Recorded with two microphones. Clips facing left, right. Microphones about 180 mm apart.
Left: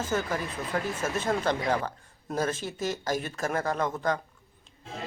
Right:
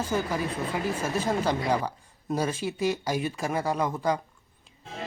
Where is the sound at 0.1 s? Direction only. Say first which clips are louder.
Right 1 dB; 10° right (ahead or behind).